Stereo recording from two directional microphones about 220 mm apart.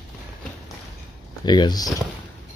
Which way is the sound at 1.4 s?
20° left (ahead or behind).